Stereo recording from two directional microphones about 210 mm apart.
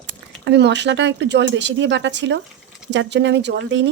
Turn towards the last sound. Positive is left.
turn(degrees=-60)  # may be behind; listen again after turning